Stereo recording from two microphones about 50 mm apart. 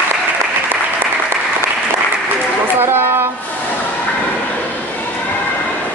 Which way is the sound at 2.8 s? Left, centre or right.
Right.